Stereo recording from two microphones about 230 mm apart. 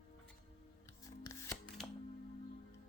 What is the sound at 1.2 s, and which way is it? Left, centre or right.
Shuffling cards, centre.